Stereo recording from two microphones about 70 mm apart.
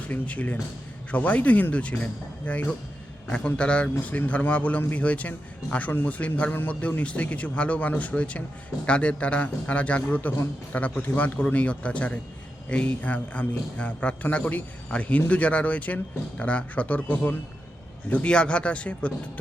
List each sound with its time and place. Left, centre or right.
0.1 s a man's voice: left